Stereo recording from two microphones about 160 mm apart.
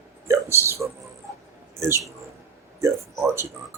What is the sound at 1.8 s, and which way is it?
Speech, 20° right (ahead or behind).